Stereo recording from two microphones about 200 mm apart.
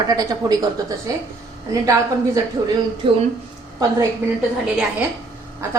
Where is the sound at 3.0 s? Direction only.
25° right (ahead or behind).